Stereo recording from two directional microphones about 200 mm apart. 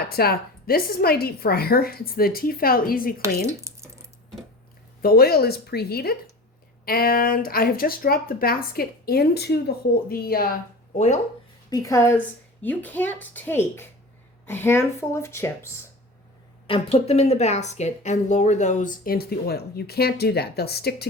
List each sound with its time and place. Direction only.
0.0 s speech: 50° left (ahead or behind)
3.4 s a sound: 15° right (ahead or behind)
5.0 s speech: 50° left (ahead or behind)
10.9 s a woman's voice: 35° left (ahead or behind)
11.7 s a woman's voice: 15° left (ahead or behind)
16.6 s a woman's voice: 30° left (ahead or behind); by 21.1 s 55° left (ahead or behind)